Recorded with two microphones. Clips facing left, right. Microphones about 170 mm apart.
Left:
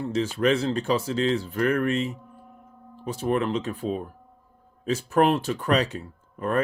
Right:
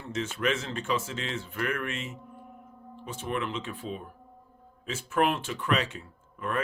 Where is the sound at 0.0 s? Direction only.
35° left (ahead or behind).